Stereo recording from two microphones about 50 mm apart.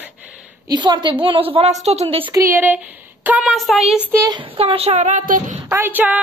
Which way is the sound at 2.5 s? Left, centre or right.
Right.